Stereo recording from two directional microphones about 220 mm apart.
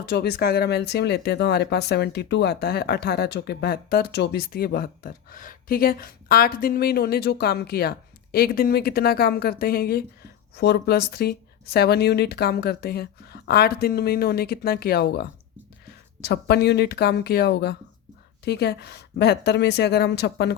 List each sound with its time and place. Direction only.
0.0 s speech: 45° left (ahead or behind)